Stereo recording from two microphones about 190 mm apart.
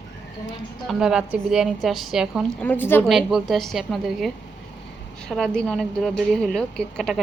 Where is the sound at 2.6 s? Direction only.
10° left (ahead or behind).